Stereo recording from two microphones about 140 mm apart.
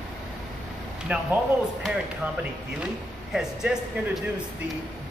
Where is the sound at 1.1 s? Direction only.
10° right (ahead or behind).